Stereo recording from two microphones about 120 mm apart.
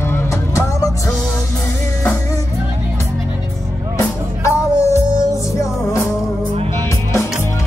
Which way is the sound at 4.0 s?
25° left (ahead or behind).